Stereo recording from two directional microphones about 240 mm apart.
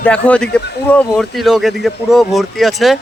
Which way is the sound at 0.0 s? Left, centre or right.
Centre.